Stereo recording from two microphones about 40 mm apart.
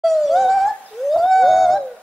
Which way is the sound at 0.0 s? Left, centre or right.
Centre.